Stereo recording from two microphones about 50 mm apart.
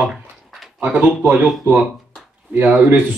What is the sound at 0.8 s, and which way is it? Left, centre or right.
Speech, right.